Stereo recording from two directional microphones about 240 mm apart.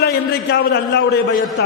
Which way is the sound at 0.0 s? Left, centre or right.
Left.